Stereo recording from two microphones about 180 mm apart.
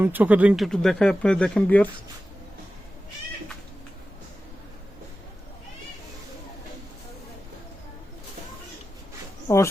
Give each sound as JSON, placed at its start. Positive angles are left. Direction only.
{"t": 0.0, "sound": "speech", "side_deg": -10}
{"t": 9.5, "sound": "speech", "side_deg": 15}